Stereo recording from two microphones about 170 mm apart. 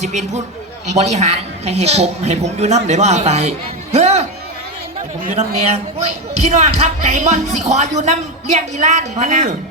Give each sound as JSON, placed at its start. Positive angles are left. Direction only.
{"t": 0.0, "sound": "a man's voice", "side_deg": -45}
{"t": 5.4, "sound": "speech", "side_deg": -40}